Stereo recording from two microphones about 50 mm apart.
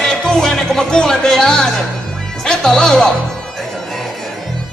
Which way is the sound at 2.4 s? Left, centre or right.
Centre.